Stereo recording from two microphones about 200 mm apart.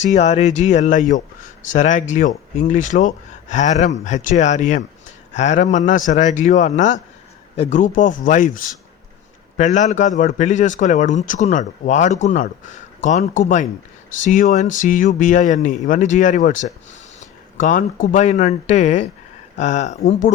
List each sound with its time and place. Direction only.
0.0 s speech: 35° left (ahead or behind)